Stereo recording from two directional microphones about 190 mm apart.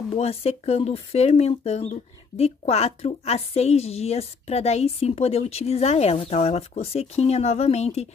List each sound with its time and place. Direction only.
0.1 s speech: 30° left (ahead or behind)